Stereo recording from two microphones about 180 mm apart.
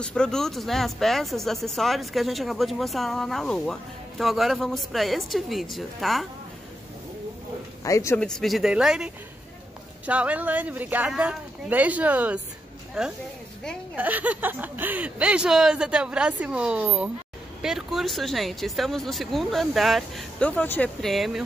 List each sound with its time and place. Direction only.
0.0 s speech: 5° left (ahead or behind)
7.8 s speech: 15° left (ahead or behind)
8.2 s speech: 5° left (ahead or behind)